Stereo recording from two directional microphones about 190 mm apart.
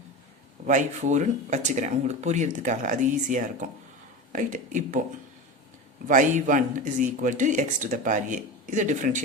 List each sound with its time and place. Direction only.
0.6 s speech: 40° right (ahead or behind)
6.1 s speech: 40° right (ahead or behind)